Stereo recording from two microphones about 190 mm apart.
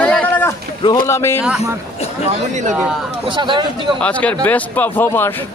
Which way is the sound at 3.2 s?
25° right (ahead or behind).